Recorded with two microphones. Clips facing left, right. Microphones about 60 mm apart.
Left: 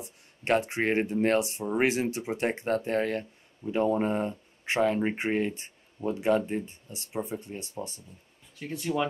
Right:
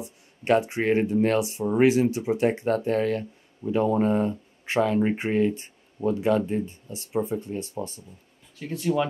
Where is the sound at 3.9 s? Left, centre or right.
Centre.